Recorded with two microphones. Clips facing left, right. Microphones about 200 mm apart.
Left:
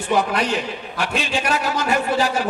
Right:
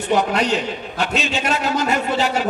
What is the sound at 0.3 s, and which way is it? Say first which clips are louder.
A man's voice: right 2 dB; 25° right (ahead or behind).